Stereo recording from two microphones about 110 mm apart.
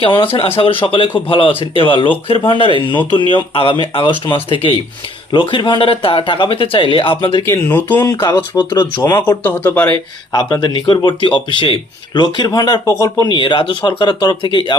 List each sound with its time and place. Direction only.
0.0 s speech: 50° left (ahead or behind)
7.4 s speech: 20° left (ahead or behind)
8.0 s speech: 30° left (ahead or behind)
8.5 s speech: 40° left (ahead or behind)
9.4 s speech: 15° left (ahead or behind)
10.3 s speech: 40° left (ahead or behind)
13.2 s speech: 45° left (ahead or behind)